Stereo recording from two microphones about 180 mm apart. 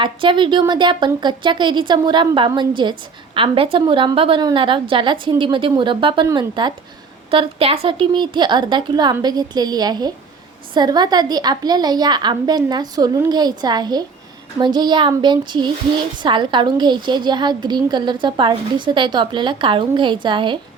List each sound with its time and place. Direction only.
0.0 s a woman's voice: 25° right (ahead or behind)